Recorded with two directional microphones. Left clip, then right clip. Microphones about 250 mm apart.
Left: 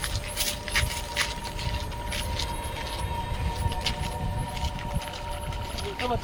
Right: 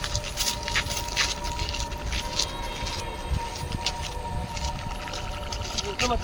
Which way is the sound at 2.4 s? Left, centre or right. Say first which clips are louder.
Right 7 dB; right.